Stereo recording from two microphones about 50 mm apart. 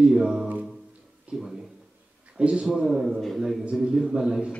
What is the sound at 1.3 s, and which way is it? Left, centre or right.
Speech, right.